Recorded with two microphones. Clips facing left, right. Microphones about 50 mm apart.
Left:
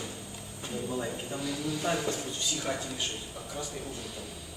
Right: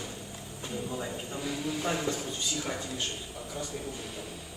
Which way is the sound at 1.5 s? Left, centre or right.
Right.